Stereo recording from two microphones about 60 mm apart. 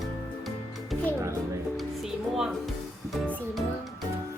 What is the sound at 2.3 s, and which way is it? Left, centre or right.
Speech, centre.